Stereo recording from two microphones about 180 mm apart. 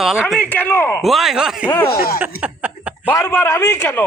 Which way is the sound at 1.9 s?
60° left (ahead or behind).